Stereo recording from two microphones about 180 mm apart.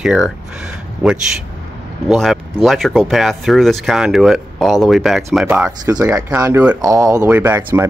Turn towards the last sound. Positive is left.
turn(degrees=-10)  # may be behind; listen again after turning